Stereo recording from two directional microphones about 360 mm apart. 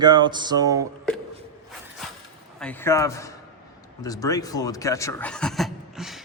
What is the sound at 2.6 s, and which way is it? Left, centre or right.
Speech, centre.